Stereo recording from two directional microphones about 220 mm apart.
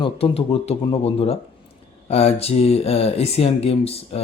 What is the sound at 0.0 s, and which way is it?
Speech, 25° left (ahead or behind).